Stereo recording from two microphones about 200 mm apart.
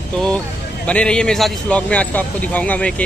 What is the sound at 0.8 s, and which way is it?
A man's voice, 5° left (ahead or behind).